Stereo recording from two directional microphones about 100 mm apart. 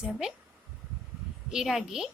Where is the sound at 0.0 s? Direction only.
5° right (ahead or behind).